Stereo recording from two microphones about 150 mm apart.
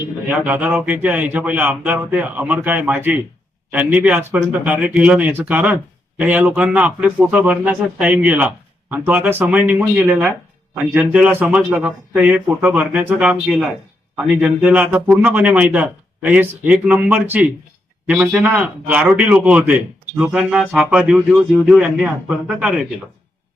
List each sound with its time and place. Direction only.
0.3 s speech: 10° right (ahead or behind)